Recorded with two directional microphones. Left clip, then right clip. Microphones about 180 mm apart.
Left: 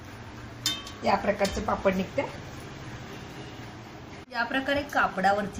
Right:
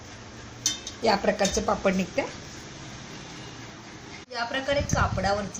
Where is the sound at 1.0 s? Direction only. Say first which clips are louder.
Right 2 dB; 55° right (ahead or behind).